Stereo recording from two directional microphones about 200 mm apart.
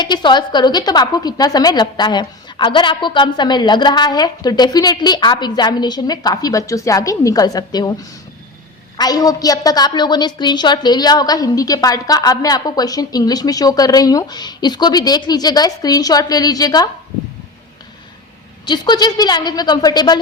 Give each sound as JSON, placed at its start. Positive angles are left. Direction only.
{"t": 0.0, "sound": "a woman's voice", "side_deg": 20}
{"t": 9.0, "sound": "a woman's voice", "side_deg": 20}
{"t": 18.6, "sound": "a woman's voice", "side_deg": 20}